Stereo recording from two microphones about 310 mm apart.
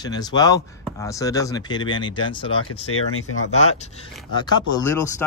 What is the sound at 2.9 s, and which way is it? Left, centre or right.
Speech, left.